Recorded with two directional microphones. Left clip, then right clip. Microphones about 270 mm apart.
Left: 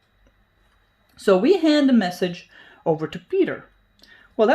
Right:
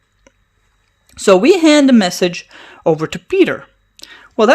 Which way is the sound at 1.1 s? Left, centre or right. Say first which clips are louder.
Right 7 dB; right.